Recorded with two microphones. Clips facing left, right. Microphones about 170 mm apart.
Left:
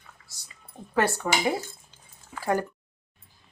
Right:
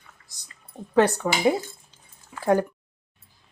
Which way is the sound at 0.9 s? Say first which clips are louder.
Right 6 dB; 15° right (ahead or behind).